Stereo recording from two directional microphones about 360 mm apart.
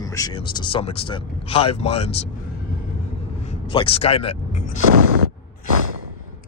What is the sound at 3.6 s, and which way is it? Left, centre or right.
Speech, centre.